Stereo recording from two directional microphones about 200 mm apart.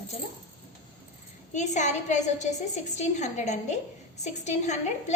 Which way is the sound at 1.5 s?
35° left (ahead or behind).